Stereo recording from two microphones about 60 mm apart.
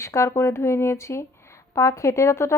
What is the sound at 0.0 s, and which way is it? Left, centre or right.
Speech, left.